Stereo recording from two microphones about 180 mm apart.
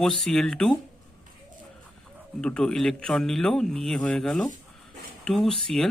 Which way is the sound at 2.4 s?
5° left (ahead or behind).